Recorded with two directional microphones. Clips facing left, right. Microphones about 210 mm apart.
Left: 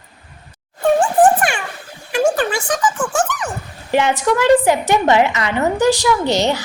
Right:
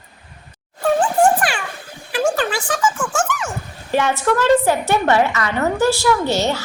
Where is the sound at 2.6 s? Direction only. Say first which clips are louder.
Left 2 dB; 20° left (ahead or behind).